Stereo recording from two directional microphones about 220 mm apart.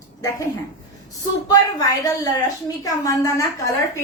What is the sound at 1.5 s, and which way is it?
A woman's voice, 15° left (ahead or behind).